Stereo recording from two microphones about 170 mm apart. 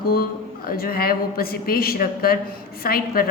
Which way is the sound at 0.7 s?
60° left (ahead or behind).